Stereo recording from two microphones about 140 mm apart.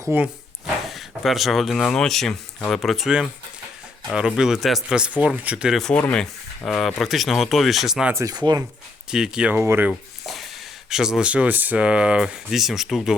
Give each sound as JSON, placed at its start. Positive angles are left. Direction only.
{"t": 0.0, "sound": "speech", "side_deg": -15}
{"t": 0.9, "sound": "speech", "side_deg": 0}
{"t": 4.4, "sound": "speech", "side_deg": 0}
{"t": 6.0, "sound": "speech", "side_deg": 10}
{"t": 8.1, "sound": "speech", "side_deg": -25}
{"t": 9.0, "sound": "speech", "side_deg": -5}
{"t": 10.2, "sound": "speech", "side_deg": 0}